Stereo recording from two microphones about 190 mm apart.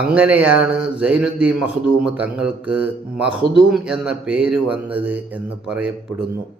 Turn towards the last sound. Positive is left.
turn(degrees=-5)  # may be behind; listen again after turning